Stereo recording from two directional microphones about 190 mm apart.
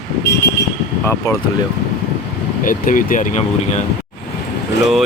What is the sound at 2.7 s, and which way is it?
Speech, 45° left (ahead or behind).